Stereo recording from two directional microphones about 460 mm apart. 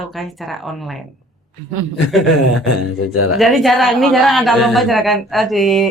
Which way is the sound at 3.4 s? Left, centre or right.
Centre.